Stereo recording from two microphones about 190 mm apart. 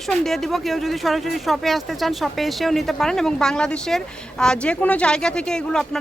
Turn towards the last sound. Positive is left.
turn(degrees=5)  # may be behind; listen again after turning